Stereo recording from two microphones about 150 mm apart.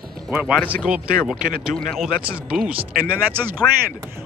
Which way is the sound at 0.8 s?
5° right (ahead or behind).